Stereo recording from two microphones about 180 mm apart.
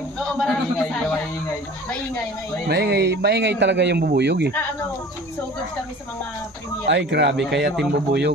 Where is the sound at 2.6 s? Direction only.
65° right (ahead or behind).